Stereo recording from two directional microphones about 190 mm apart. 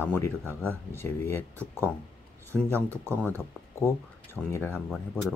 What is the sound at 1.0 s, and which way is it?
Speech, 10° left (ahead or behind).